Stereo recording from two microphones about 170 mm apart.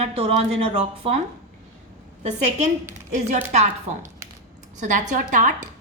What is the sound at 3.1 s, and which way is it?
A woman's voice, 45° right (ahead or behind).